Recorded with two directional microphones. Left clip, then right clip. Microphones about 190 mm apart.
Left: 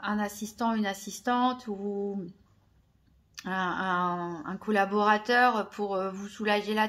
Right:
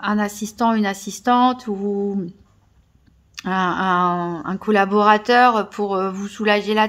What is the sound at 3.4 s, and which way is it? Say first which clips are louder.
Speech: right 10 dB; 30° right (ahead or behind).